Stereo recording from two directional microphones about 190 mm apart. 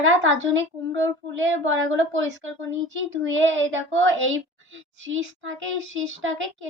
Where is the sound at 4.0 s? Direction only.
90° right.